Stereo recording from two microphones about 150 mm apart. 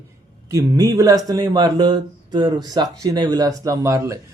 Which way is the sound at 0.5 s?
25° right (ahead or behind).